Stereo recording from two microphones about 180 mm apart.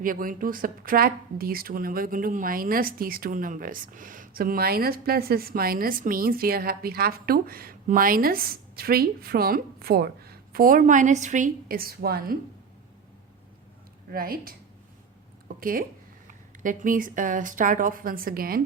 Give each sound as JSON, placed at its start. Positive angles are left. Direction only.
{"t": 0.0, "sound": "speech", "side_deg": -50}
{"t": 14.1, "sound": "a woman's voice", "side_deg": -55}
{"t": 15.4, "sound": "a sound", "side_deg": -50}
{"t": 16.2, "sound": "speech", "side_deg": -50}